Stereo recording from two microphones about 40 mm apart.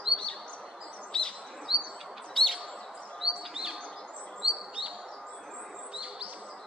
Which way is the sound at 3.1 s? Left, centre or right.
Centre.